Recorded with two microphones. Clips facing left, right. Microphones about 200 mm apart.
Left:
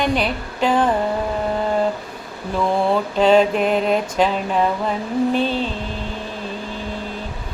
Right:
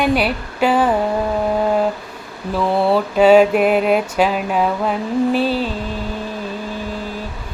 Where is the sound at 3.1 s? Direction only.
10° right (ahead or behind).